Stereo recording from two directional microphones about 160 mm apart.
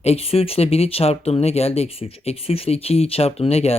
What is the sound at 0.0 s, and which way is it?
Speech, 40° left (ahead or behind).